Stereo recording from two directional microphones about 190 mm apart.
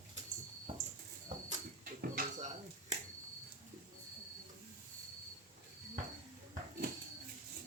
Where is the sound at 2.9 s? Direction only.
40° right (ahead or behind).